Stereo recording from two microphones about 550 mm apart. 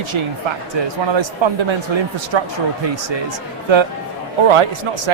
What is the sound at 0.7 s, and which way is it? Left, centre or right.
Speech, right.